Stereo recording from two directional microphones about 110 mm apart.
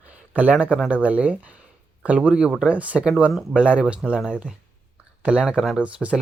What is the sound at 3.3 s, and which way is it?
Speech, centre (ahead or behind).